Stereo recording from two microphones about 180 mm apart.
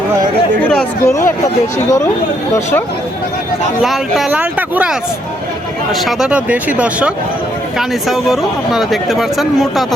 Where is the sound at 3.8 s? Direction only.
Centre (ahead or behind).